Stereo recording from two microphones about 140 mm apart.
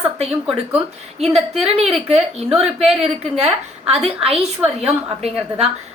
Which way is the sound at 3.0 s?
45° right (ahead or behind).